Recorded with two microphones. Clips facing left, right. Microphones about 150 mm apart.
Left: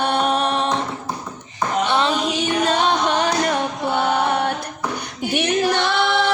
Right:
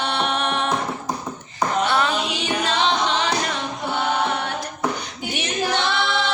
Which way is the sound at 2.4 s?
50° left (ahead or behind).